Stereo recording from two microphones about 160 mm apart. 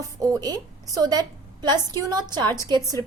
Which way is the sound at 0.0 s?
20° right (ahead or behind).